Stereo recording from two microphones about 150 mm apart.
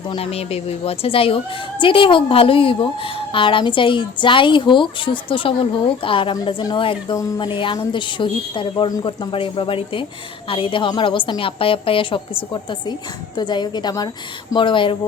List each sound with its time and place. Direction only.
0.2 s a woman's voice: 40° left (ahead or behind)